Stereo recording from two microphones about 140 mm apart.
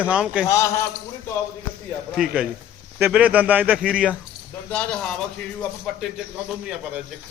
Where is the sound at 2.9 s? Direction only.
10° right (ahead or behind).